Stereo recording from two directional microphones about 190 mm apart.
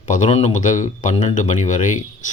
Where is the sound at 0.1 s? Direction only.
35° left (ahead or behind).